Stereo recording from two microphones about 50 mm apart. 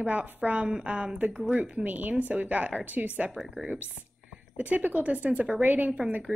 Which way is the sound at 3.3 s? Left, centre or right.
Centre.